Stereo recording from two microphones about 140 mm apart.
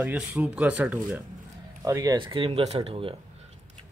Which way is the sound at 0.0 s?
10° right (ahead or behind).